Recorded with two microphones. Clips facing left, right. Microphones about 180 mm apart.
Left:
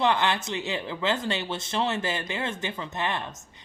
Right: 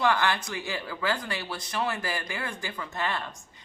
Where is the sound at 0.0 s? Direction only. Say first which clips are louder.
Left 1 dB; 20° left (ahead or behind).